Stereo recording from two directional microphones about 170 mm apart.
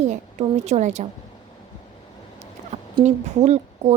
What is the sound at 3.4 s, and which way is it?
Speech, 40° right (ahead or behind).